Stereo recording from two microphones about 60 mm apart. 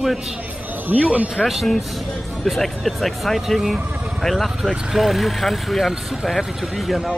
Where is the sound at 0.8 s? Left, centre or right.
Right.